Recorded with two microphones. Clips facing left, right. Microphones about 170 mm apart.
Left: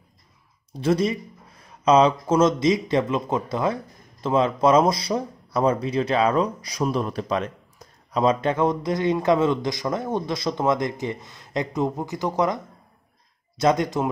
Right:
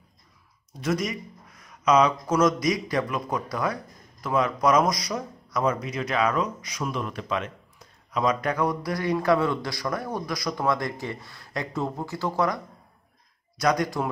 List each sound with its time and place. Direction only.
0.7 s speech: 30° left (ahead or behind)
13.6 s speech: 25° left (ahead or behind)